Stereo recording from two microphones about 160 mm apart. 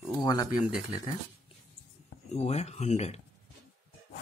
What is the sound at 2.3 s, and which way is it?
Speech, 45° left (ahead or behind).